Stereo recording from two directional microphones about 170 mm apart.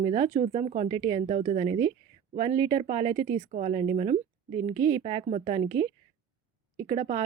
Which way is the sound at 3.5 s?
40° right (ahead or behind).